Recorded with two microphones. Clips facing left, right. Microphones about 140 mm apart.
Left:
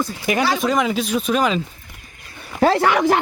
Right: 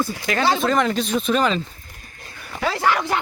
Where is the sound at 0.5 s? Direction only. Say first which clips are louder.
Even; 10° left (ahead or behind).